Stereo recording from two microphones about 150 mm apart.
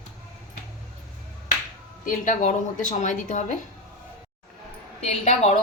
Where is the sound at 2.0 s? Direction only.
55° left (ahead or behind).